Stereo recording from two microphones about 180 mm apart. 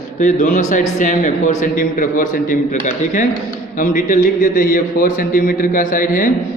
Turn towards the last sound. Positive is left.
turn(degrees=50)  # may be behind; listen again after turning